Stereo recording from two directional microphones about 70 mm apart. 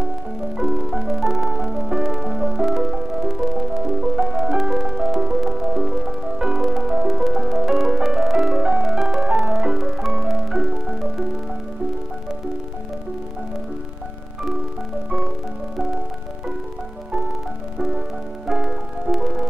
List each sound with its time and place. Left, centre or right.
0.6 s music: centre
18.5 s music: centre